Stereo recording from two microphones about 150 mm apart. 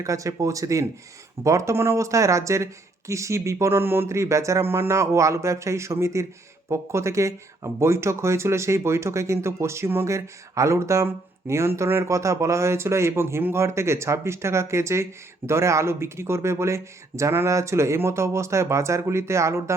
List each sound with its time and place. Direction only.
0.0 s speech: 20° right (ahead or behind)